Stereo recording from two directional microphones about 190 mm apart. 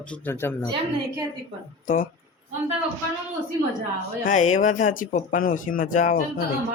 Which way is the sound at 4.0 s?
40° left (ahead or behind).